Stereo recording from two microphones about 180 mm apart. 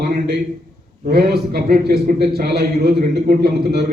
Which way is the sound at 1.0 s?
60° right (ahead or behind).